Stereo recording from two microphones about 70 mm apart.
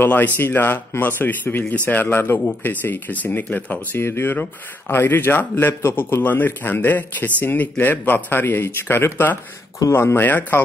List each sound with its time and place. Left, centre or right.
0.0 s speech: left
4.0 s speech: left